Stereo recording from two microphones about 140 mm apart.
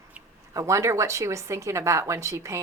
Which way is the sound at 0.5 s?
20° right (ahead or behind).